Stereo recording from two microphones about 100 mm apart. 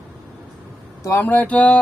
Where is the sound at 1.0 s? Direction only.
25° left (ahead or behind).